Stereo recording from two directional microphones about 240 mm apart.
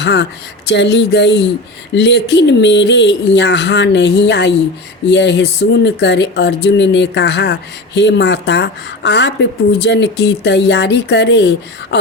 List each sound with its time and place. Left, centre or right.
0.0 s speech: left